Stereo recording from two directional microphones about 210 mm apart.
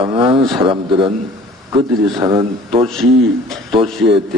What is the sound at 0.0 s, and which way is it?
Speech, 25° right (ahead or behind).